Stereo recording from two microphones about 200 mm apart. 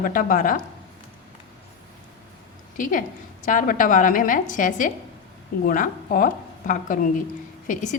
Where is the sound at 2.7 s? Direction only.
40° left (ahead or behind).